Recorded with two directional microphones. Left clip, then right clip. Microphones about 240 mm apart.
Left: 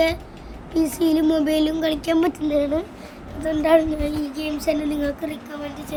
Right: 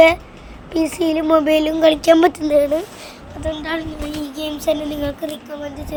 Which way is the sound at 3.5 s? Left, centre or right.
Centre.